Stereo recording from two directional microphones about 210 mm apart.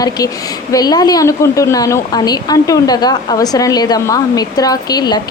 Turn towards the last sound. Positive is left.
turn(degrees=20)  # may be behind; listen again after turning